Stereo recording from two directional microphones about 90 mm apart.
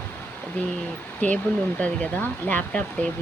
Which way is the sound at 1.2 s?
15° left (ahead or behind).